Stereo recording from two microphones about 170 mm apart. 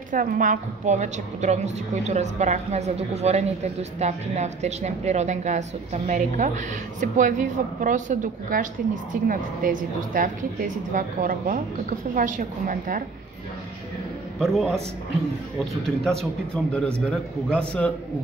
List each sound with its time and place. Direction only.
0.1 s a woman's voice: 50° right (ahead or behind)
14.4 s a man's voice: centre (ahead or behind)
16.0 s a man's voice: 5° left (ahead or behind)